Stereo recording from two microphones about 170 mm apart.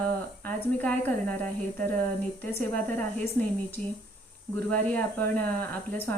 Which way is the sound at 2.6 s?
10° left (ahead or behind).